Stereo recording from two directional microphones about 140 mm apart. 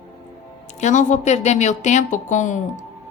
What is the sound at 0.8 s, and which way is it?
Speech, 60° left (ahead or behind).